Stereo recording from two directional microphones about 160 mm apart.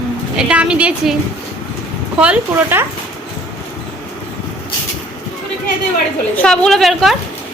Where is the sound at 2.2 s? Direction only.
10° right (ahead or behind).